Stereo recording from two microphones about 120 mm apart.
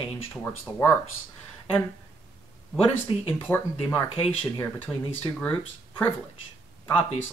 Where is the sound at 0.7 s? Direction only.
20° right (ahead or behind).